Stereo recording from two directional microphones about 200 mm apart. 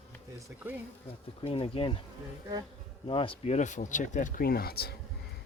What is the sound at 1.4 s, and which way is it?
Speech, 30° left (ahead or behind).